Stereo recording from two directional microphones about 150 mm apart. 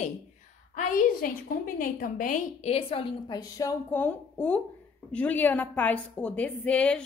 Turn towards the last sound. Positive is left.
turn(degrees=5)  # may be behind; listen again after turning